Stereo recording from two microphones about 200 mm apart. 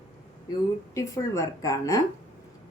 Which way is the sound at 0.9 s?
15° left (ahead or behind).